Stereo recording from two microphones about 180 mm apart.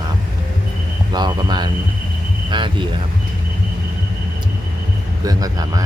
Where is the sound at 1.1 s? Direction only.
25° right (ahead or behind).